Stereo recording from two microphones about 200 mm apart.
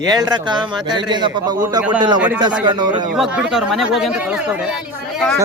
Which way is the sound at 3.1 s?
5° right (ahead or behind).